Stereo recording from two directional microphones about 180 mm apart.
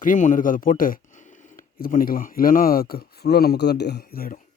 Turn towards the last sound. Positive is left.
turn(degrees=55)  # may be behind; listen again after turning